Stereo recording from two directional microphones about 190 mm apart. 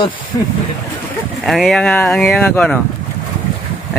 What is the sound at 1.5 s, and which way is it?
Speech, centre (ahead or behind).